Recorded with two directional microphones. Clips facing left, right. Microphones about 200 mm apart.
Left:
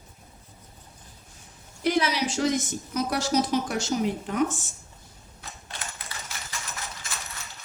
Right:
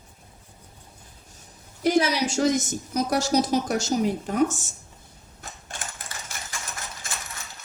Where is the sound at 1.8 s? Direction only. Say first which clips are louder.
Right 3 dB; 45° right (ahead or behind).